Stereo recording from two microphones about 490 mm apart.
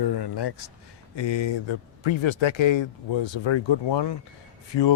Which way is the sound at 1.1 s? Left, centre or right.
Left.